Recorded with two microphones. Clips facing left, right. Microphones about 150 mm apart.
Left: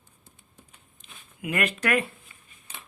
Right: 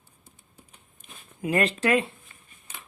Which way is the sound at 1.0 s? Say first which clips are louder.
Right 2 dB; 50° right (ahead or behind).